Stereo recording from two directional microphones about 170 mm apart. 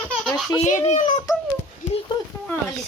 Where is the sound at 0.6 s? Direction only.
45° left (ahead or behind).